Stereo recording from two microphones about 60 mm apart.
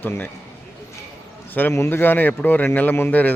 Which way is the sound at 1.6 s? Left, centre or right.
Left.